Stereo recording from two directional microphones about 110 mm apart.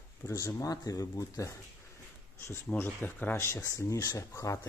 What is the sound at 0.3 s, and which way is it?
Speech, 30° left (ahead or behind).